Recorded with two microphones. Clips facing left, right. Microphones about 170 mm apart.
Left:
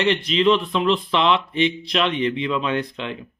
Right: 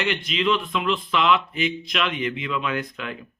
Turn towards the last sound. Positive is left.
turn(degrees=25)  # may be behind; listen again after turning